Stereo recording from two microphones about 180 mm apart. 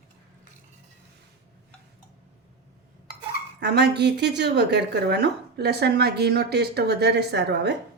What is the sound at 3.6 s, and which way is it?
Speech, 70° right (ahead or behind).